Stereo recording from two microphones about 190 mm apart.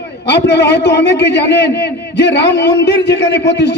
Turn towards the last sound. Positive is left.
turn(degrees=65)  # may be behind; listen again after turning